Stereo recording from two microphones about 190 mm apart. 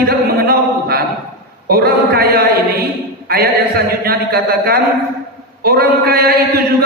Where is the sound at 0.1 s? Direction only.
50° right (ahead or behind).